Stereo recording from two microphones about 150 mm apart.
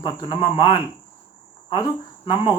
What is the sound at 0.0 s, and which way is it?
Speech, 30° left (ahead or behind).